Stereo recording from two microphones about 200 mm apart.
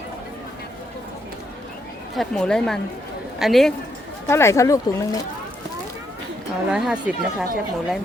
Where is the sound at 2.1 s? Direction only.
Centre (ahead or behind).